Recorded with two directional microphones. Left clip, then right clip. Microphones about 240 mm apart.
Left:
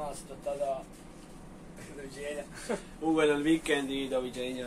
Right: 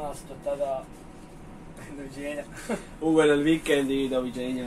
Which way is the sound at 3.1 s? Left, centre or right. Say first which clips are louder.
Right 5 dB; right.